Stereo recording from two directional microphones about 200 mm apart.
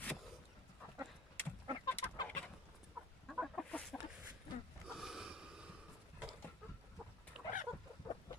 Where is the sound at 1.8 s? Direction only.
20° left (ahead or behind).